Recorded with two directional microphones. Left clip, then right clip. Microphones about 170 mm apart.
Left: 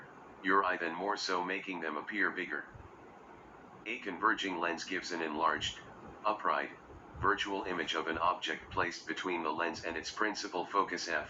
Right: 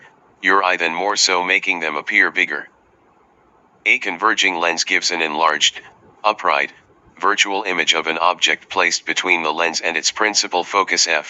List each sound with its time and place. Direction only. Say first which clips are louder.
0.4 s speech: right 15 dB; 70° right (ahead or behind)
3.8 s speech: right 17 dB; 70° right (ahead or behind)